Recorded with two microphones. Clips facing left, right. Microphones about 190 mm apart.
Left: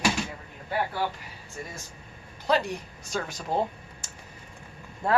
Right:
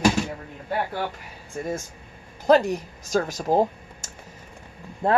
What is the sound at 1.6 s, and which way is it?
Speech, 55° right (ahead or behind).